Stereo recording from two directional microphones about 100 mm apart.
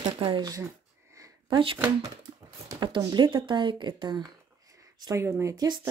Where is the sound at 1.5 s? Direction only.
60° right (ahead or behind).